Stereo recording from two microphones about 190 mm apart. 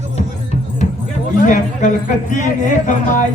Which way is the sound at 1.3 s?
45° left (ahead or behind).